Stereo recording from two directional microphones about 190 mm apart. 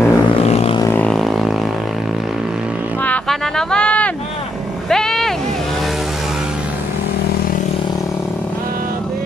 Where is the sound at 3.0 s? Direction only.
5° left (ahead or behind).